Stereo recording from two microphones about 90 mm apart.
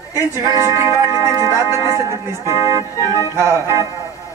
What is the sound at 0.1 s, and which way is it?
Speech, 35° right (ahead or behind).